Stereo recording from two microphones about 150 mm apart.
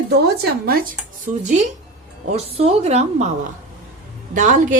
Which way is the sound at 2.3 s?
40° right (ahead or behind).